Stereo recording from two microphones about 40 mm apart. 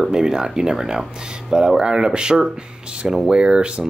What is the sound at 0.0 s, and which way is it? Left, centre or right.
Speech, centre.